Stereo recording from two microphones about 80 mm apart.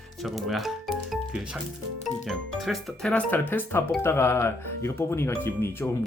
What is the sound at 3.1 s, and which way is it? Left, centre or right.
Speech, left.